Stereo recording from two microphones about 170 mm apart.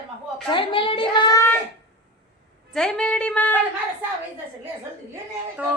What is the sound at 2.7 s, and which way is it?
Speech, 5° left (ahead or behind).